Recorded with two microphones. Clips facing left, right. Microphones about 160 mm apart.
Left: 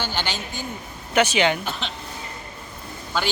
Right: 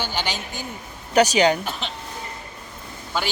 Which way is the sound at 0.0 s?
10° right (ahead or behind).